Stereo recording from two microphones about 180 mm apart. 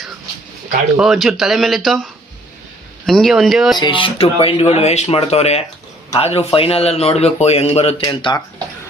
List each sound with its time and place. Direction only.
0.9 s speech: centre (ahead or behind)
3.1 s speech: centre (ahead or behind)
3.8 s a man's voice: 25° left (ahead or behind)